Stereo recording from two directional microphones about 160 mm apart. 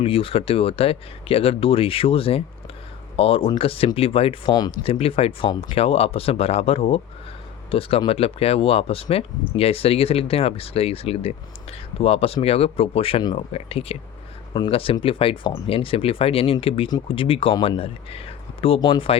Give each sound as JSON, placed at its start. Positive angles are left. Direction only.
{"t": 0.0, "sound": "speech", "side_deg": 35}